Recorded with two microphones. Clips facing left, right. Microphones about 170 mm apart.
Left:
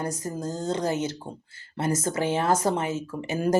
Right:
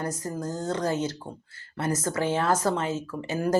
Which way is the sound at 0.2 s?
25° left (ahead or behind).